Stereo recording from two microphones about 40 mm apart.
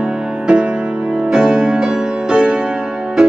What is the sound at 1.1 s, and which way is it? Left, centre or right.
Music, centre.